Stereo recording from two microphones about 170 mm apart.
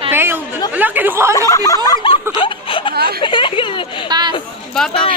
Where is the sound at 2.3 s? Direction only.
30° left (ahead or behind).